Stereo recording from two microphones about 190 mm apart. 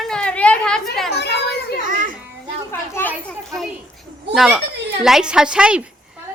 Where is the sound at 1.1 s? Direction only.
60° left (ahead or behind).